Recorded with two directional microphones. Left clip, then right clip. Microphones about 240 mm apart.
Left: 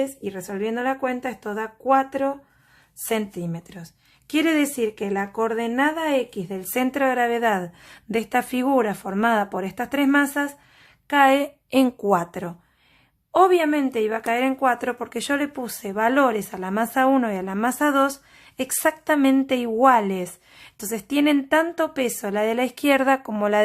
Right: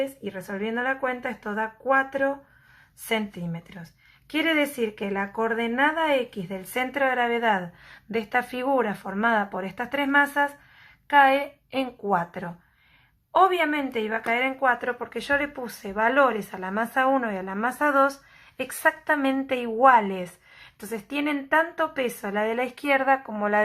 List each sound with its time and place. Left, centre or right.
0.0 s a woman's voice: left